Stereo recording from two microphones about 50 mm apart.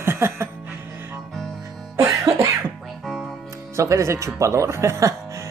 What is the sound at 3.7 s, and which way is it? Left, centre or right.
Speech, right.